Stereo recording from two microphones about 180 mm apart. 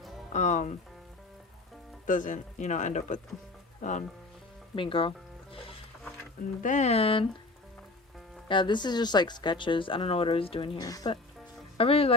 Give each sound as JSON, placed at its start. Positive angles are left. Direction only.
{"t": 0.3, "sound": "speech", "side_deg": 40}
{"t": 2.0, "sound": "a man's voice", "side_deg": 45}
{"t": 4.7, "sound": "speech", "side_deg": 30}
{"t": 6.6, "sound": "speech", "side_deg": 45}
{"t": 8.4, "sound": "speech", "side_deg": 25}
{"t": 11.8, "sound": "speech", "side_deg": 30}